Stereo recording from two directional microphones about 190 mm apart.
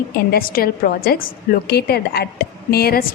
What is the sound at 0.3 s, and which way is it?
A woman's voice, 50° left (ahead or behind).